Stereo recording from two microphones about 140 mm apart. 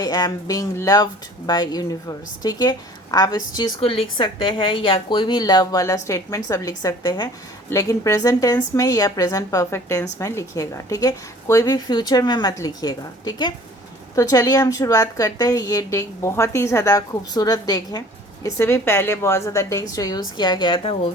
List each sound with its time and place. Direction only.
0.0 s a woman's voice: 25° left (ahead or behind)
3.8 s a woman's voice: 40° left (ahead or behind)